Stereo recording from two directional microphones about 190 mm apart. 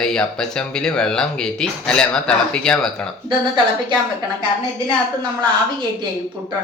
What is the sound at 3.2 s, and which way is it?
Speech, 25° right (ahead or behind).